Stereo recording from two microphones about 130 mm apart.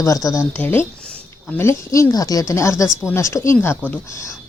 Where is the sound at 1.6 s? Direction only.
20° left (ahead or behind).